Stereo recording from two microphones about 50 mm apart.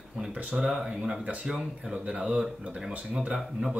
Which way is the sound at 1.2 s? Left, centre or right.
Right.